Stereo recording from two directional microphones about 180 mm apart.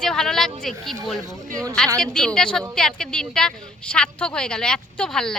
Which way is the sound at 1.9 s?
5° left (ahead or behind).